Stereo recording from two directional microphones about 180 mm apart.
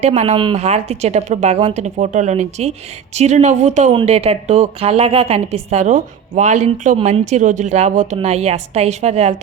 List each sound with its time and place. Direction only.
0.0 s a woman's voice: 40° right (ahead or behind)